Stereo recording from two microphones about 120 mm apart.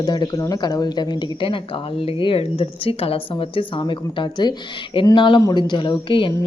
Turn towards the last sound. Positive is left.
turn(degrees=45)  # may be behind; listen again after turning